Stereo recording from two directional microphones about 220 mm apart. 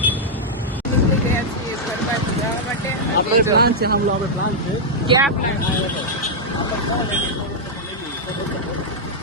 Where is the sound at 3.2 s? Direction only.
45° left (ahead or behind).